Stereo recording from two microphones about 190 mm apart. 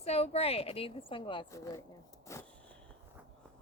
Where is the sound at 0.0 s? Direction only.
35° left (ahead or behind).